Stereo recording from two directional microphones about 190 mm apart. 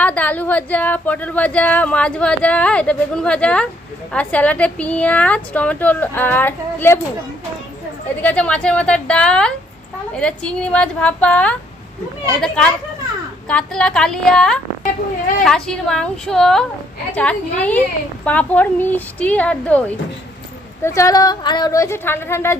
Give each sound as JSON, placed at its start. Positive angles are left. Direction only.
{"t": 0.0, "sound": "speech", "side_deg": 5}
{"t": 8.2, "sound": "a woman's voice", "side_deg": 5}